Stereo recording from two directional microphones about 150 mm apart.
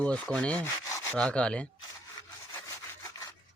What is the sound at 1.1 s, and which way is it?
Rub, 5° left (ahead or behind).